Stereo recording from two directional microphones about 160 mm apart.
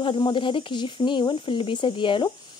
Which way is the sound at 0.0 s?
30° left (ahead or behind).